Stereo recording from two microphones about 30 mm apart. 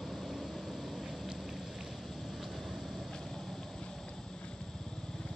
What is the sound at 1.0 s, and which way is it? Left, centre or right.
Vehicle, centre.